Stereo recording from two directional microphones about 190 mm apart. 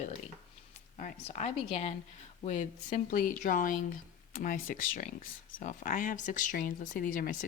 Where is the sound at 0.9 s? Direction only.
40° left (ahead or behind).